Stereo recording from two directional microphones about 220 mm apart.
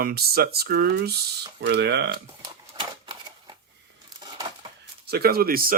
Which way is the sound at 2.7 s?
20° right (ahead or behind).